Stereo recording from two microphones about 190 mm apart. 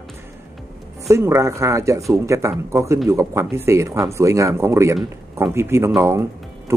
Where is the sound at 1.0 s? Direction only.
15° right (ahead or behind).